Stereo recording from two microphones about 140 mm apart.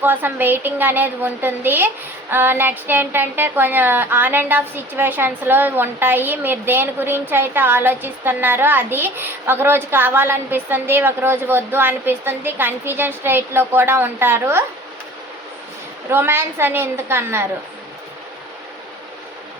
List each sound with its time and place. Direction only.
0.0 s speech: 15° right (ahead or behind)
16.1 s speech: 15° right (ahead or behind)